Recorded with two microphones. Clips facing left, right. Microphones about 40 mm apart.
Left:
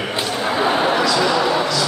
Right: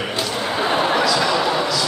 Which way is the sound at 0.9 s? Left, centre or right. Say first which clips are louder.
Left 1 dB; centre.